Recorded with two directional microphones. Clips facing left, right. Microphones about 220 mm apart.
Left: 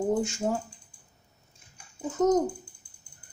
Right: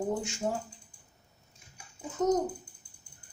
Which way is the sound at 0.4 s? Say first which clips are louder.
Left 2 dB; 45° left (ahead or behind).